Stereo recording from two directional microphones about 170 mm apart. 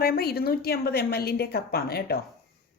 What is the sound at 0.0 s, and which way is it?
A woman's voice, 65° left (ahead or behind).